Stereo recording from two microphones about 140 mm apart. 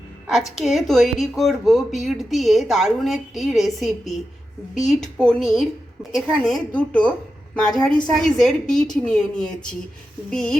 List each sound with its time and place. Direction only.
0.6 s speech: centre (ahead or behind)